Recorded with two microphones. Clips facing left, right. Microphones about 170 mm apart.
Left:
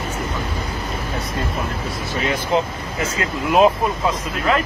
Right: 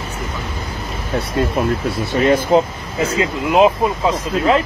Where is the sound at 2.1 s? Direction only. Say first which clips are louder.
Right 9 dB; 55° right (ahead or behind).